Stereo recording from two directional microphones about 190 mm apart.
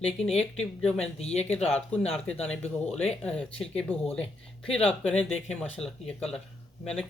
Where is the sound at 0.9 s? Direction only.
35° left (ahead or behind).